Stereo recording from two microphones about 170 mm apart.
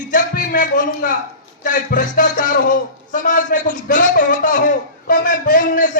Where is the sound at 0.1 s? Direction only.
55° left (ahead or behind).